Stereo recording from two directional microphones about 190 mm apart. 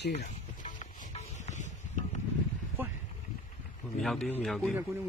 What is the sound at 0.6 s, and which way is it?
Music, 40° left (ahead or behind).